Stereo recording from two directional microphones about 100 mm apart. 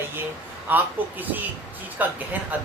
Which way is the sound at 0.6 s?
20° right (ahead or behind).